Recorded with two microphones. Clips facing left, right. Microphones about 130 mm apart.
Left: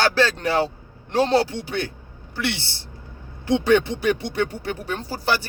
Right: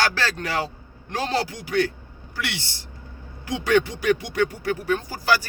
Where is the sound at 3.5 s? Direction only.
25° left (ahead or behind).